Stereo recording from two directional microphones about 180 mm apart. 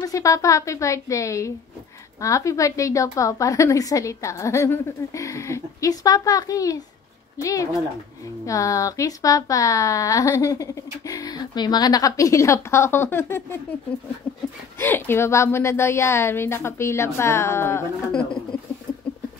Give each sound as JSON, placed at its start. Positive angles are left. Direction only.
{"t": 0.0, "sound": "speech", "side_deg": 20}
{"t": 8.5, "sound": "speech", "side_deg": 20}